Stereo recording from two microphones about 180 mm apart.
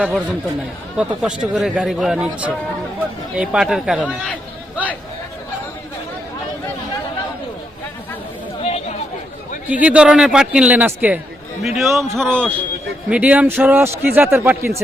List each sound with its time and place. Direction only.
0.0 s speech: 5° right (ahead or behind)
8.6 s chatter: 35° left (ahead or behind)
9.6 s a man's voice: 10° right (ahead or behind)
13.1 s a man's voice: 10° right (ahead or behind)